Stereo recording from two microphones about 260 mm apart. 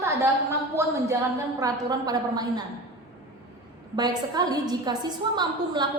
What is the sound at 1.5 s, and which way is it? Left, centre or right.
A woman's voice, centre.